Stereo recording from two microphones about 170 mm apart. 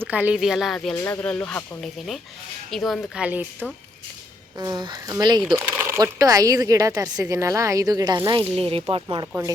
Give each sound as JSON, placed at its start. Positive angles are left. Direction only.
{"t": 0.0, "sound": "speech", "side_deg": -10}
{"t": 1.0, "sound": "speech", "side_deg": 10}
{"t": 4.5, "sound": "speech", "side_deg": -25}